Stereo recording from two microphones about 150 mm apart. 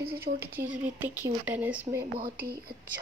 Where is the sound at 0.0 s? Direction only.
90° right.